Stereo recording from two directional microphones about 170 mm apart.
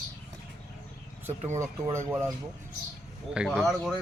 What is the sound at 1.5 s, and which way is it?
Speech, 15° right (ahead or behind).